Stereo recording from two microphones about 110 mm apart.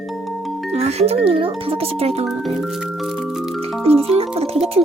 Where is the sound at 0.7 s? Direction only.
75° right (ahead or behind).